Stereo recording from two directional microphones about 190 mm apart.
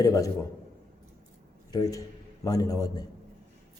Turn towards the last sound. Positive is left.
turn(degrees=20)  # may be behind; listen again after turning